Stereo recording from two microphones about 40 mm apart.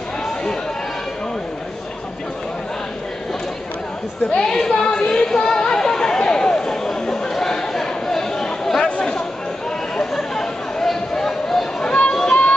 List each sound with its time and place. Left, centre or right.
4.4 s chatter: centre
10.1 s chatter: centre
11.8 s a sound: left